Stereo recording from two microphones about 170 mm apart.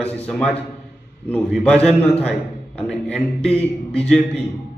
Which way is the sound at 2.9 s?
5° left (ahead or behind).